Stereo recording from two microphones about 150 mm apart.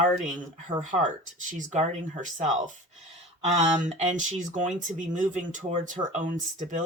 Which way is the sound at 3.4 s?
55° right (ahead or behind).